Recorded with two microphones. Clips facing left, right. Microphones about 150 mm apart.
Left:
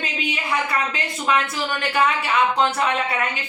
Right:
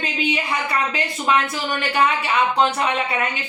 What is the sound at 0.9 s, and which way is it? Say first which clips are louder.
A woman's voice: right 2 dB; 5° right (ahead or behind).